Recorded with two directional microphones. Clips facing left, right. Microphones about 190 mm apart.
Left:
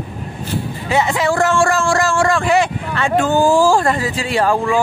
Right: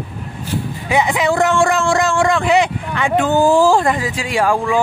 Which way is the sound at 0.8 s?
15° right (ahead or behind).